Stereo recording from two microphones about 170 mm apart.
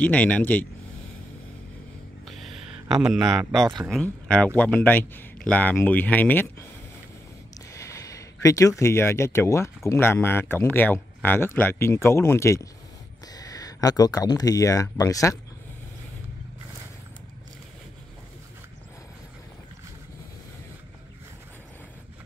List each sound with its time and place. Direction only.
0.0 s speech: 10° left (ahead or behind)
2.2 s a sound: centre (ahead or behind)
3.0 s a man's voice: 5° right (ahead or behind)
7.7 s speech: 20° left (ahead or behind)